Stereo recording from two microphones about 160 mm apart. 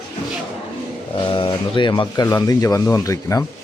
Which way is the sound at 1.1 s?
30° left (ahead or behind).